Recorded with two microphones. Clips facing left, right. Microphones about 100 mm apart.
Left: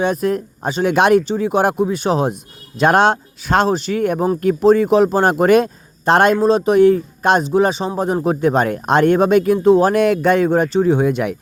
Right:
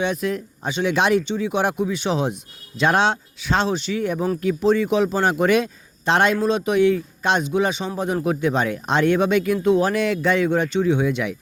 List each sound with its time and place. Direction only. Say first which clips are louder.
0.0 s speech: left 5 dB; 45° left (ahead or behind)
9.9 s speech: left 6 dB; 50° left (ahead or behind)